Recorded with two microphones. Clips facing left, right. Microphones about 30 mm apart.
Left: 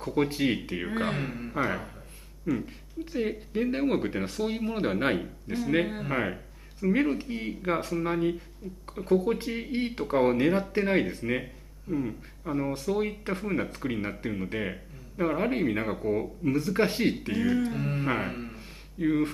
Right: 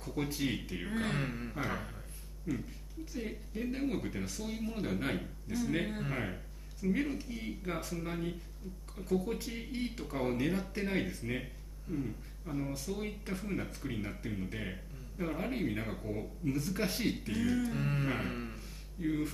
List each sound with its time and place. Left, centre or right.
0.0 s speech: left
1.1 s speech: centre
2.5 s speech: left
5.9 s speech: centre
6.1 s speech: left
17.3 s speech: left
17.7 s speech: centre
18.0 s speech: left
18.3 s a sound: centre
18.9 s speech: left